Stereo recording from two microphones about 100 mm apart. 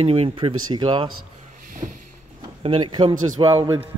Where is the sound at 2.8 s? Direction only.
50° right (ahead or behind).